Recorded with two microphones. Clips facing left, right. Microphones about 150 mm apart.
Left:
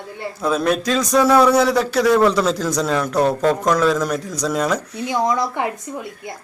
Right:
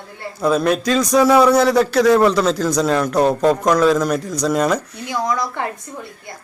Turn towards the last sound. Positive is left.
turn(degrees=20)  # may be behind; listen again after turning